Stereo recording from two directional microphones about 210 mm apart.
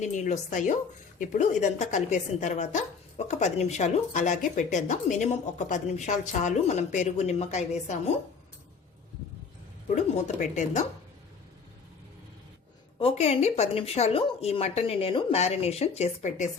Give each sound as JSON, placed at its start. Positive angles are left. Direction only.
{"t": 0.0, "sound": "speech", "side_deg": 35}
{"t": 9.9, "sound": "speech", "side_deg": 35}
{"t": 13.0, "sound": "speech", "side_deg": 30}